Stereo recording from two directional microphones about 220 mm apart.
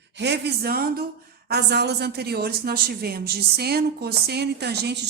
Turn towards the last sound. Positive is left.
turn(degrees=-50)  # may be behind; listen again after turning